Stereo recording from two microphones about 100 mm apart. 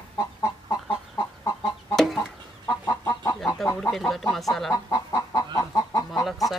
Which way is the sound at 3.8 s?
5° left (ahead or behind).